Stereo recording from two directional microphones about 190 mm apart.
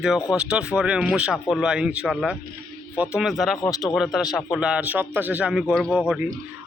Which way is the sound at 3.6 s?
20° left (ahead or behind).